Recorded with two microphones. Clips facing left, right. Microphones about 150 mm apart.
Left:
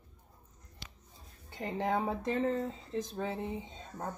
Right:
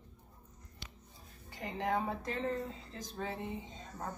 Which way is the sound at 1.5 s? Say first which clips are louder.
Left 2 dB; 25° left (ahead or behind).